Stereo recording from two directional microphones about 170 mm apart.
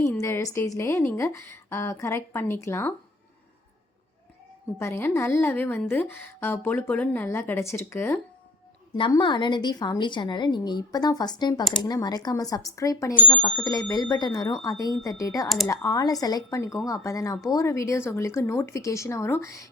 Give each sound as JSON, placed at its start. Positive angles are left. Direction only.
{"t": 0.0, "sound": "a woman's voice", "side_deg": 15}
{"t": 4.8, "sound": "a woman's voice", "side_deg": 15}
{"t": 9.0, "sound": "a woman's voice", "side_deg": 30}